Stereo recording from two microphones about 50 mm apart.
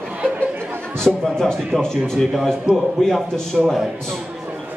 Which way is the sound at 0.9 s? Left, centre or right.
Centre.